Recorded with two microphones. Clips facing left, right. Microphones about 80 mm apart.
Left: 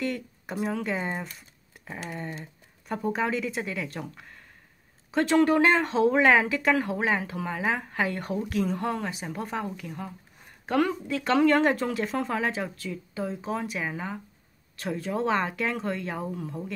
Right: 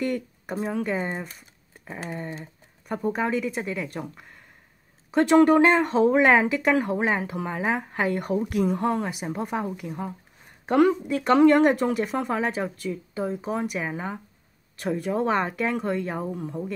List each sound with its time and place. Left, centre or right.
0.0 s a sound: centre
0.6 s speech: right
0.8 s speech: centre
2.0 s speech: right
2.4 s a woman's voice: centre
5.1 s speech: centre